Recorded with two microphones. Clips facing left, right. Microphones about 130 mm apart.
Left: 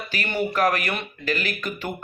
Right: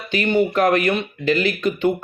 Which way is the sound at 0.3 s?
20° right (ahead or behind).